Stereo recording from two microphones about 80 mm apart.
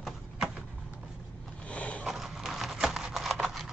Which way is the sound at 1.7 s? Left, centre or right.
Centre.